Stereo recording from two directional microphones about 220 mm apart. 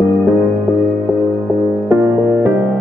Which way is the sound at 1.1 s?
5° right (ahead or behind).